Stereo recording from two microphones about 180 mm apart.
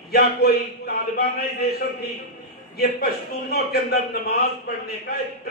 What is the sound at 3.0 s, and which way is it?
A man's voice, 60° left (ahead or behind).